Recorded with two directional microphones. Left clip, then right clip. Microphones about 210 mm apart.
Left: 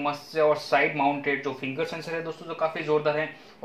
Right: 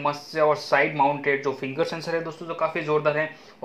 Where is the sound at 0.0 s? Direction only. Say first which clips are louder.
Right 2 dB; 45° right (ahead or behind).